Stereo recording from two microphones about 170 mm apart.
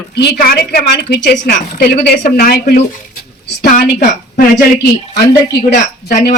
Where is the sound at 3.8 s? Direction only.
70° left (ahead or behind).